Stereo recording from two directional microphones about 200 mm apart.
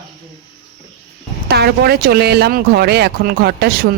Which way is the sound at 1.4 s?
55° right (ahead or behind).